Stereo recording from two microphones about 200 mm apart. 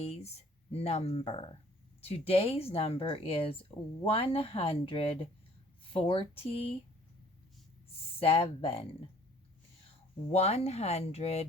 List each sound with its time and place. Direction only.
0.0 s a sound: 30° left (ahead or behind)
0.7 s speech: 30° left (ahead or behind)
8.2 s speech: 30° left (ahead or behind)
10.3 s speech: 30° left (ahead or behind)